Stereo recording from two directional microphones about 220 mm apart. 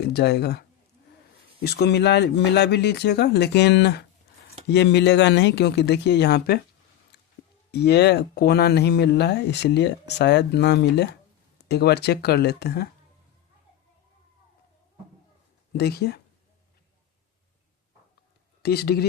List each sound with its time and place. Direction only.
0.0 s speech: 45° left (ahead or behind)
1.6 s speech: 50° left (ahead or behind)
7.1 s music: 50° left (ahead or behind)
7.7 s speech: 50° left (ahead or behind)
15.7 s speech: 45° left (ahead or behind)
18.6 s speech: 45° left (ahead or behind)